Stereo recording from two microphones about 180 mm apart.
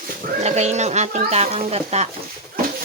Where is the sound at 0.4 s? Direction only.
40° right (ahead or behind).